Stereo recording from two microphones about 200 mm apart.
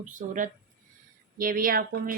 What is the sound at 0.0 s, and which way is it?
Speech, 40° right (ahead or behind).